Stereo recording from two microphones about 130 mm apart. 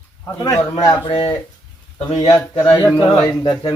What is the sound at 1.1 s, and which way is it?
Speech, 45° left (ahead or behind).